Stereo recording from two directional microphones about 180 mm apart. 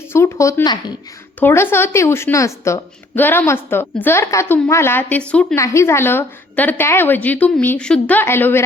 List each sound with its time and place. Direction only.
0.1 s speech: 15° left (ahead or behind)
1.4 s a woman's voice: 10° left (ahead or behind)